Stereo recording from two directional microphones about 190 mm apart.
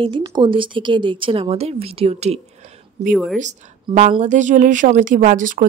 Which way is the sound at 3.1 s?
Centre (ahead or behind).